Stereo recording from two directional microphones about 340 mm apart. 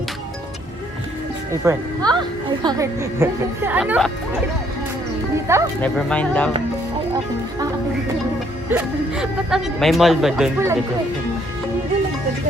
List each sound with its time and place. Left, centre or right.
1.6 s speech: centre
5.5 s speech: centre
5.8 s speech: centre
8.7 s speech: centre